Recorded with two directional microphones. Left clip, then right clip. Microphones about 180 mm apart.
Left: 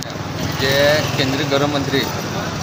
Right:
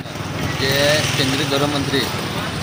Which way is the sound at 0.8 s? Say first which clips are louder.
Left 2 dB; 35° left (ahead or behind).